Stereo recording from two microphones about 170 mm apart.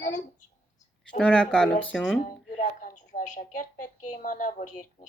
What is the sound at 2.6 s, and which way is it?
A woman's voice, 50° left (ahead or behind).